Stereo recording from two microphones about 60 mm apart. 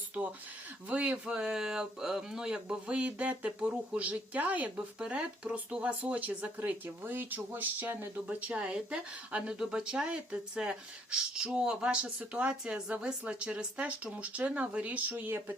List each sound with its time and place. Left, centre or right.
0.9 s speech: right
15.1 s speech: right